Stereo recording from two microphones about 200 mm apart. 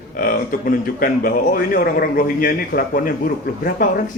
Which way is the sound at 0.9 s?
45° left (ahead or behind).